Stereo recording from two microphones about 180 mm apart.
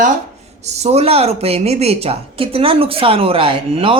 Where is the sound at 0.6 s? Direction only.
40° right (ahead or behind).